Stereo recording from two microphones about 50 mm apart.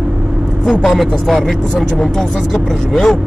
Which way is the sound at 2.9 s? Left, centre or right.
Centre.